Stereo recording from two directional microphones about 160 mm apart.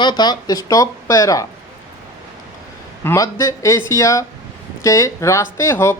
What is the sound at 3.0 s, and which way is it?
Speech, 15° left (ahead or behind).